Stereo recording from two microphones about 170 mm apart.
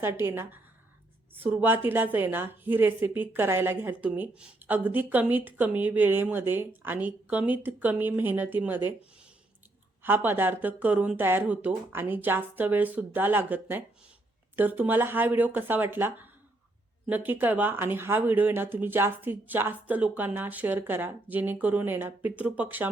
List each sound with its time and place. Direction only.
0.0 s a woman's voice: 15° right (ahead or behind)
10.0 s a woman's voice: 10° right (ahead or behind)